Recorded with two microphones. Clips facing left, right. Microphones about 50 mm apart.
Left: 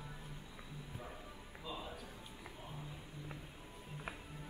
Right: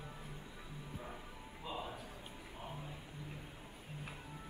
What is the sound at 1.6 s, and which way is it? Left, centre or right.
Music, right.